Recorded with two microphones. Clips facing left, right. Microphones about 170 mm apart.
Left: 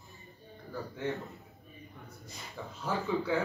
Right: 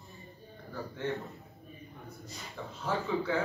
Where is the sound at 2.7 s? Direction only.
15° left (ahead or behind).